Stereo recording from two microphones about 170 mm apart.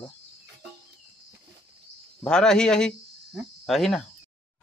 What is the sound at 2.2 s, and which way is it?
Speech, 5° left (ahead or behind).